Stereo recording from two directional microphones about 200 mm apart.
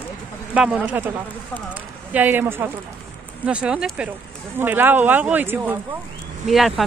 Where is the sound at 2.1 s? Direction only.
10° right (ahead or behind).